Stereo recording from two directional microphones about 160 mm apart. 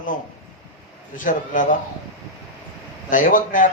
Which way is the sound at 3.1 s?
55° left (ahead or behind).